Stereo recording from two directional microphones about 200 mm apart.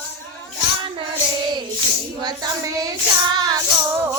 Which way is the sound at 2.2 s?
20° right (ahead or behind).